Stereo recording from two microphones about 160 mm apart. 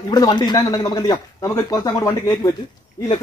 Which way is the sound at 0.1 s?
25° left (ahead or behind).